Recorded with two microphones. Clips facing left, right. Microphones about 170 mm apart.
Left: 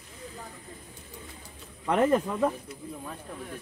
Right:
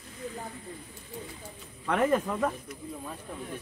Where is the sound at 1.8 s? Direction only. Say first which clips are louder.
Left 2 dB; 20° left (ahead or behind).